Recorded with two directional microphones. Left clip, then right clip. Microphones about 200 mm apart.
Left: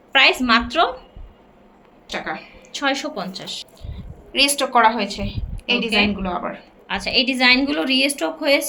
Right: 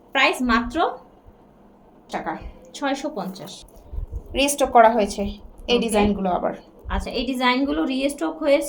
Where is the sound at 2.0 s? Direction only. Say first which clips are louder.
Left 1 dB; 45° right (ahead or behind).